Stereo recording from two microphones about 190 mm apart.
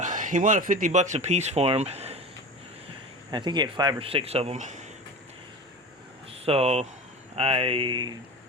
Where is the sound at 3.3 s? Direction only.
25° right (ahead or behind); by 4.8 s 40° right (ahead or behind).